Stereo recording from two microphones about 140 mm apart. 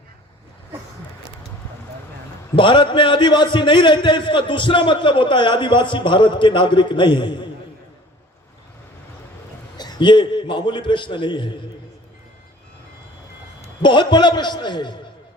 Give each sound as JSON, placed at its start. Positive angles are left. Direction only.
{"t": 2.6, "sound": "a man's voice", "side_deg": 35}
{"t": 9.7, "sound": "a man's voice", "side_deg": 30}
{"t": 13.8, "sound": "a man's voice", "side_deg": 35}